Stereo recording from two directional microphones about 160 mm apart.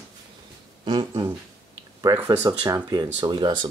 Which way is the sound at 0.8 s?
30° right (ahead or behind).